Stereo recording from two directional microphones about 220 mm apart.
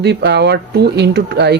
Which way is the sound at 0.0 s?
50° right (ahead or behind).